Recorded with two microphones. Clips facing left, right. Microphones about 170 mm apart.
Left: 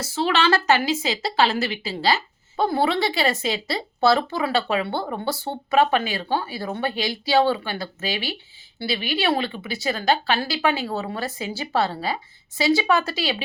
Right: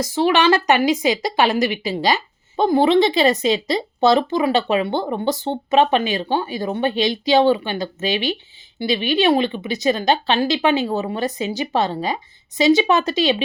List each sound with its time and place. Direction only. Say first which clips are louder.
0.0 s a woman's voice: right 5 dB; 15° right (ahead or behind)